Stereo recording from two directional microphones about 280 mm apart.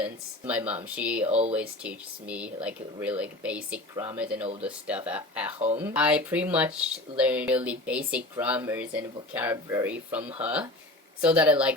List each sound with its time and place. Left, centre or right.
0.0 s speech: centre
5.5 s speech: right
5.8 s speech: centre